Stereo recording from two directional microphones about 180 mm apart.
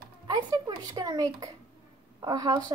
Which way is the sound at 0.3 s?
20° right (ahead or behind).